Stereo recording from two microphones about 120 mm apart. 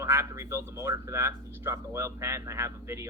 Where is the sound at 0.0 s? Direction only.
25° right (ahead or behind).